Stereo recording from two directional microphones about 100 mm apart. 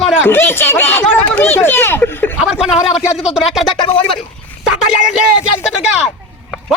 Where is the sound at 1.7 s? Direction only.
25° left (ahead or behind).